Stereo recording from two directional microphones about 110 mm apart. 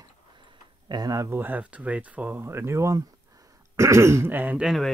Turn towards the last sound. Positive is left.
turn(degrees=0)  # may be behind; listen again after turning